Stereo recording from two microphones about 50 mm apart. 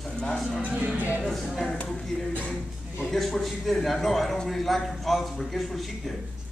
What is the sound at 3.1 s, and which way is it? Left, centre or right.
A man's voice, centre.